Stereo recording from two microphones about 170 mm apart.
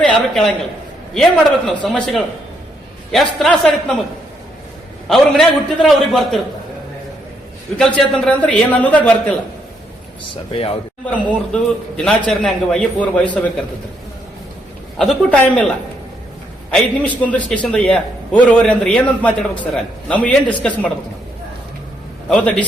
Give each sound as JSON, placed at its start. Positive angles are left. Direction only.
{"t": 0.0, "sound": "a man's voice", "side_deg": 5}
{"t": 5.0, "sound": "a man's voice", "side_deg": 0}
{"t": 7.8, "sound": "a man's voice", "side_deg": 5}
{"t": 10.5, "sound": "a man's voice", "side_deg": 35}
{"t": 11.0, "sound": "a man's voice", "side_deg": 5}
{"t": 14.9, "sound": "a man's voice", "side_deg": 5}
{"t": 16.7, "sound": "a man's voice", "side_deg": 10}
{"t": 22.3, "sound": "a man's voice", "side_deg": 5}